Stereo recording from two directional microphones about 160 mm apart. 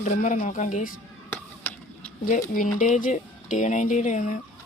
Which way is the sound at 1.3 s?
10° left (ahead or behind).